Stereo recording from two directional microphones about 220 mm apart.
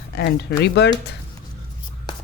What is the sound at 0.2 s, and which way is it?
Speech, 50° left (ahead or behind).